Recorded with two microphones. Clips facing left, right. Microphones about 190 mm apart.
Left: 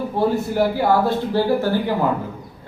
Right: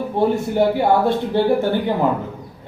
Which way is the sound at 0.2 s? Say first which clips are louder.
Right 2 dB; 20° right (ahead or behind).